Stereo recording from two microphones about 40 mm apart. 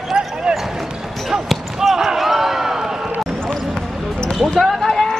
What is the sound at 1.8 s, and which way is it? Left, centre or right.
Basketball bounce, centre.